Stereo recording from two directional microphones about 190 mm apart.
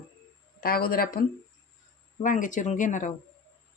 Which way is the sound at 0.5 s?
50° left (ahead or behind).